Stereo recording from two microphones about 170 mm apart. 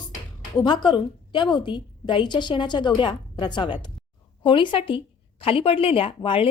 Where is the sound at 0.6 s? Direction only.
25° left (ahead or behind).